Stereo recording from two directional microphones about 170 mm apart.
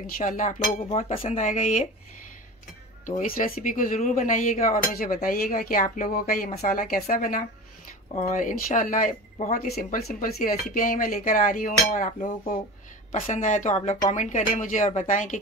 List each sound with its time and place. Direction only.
0.2 s speech: 45° left (ahead or behind)
3.1 s speech: 50° left (ahead or behind)
8.1 s speech: 40° left (ahead or behind)